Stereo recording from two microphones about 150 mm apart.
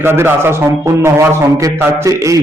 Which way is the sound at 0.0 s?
15° right (ahead or behind).